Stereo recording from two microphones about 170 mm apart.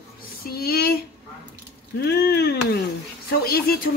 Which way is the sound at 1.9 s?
70° left (ahead or behind).